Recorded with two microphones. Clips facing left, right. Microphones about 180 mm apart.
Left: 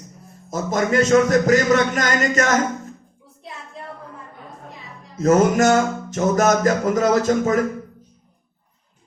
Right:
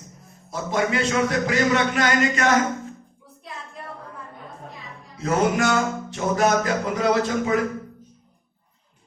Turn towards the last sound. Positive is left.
turn(degrees=45)  # may be behind; listen again after turning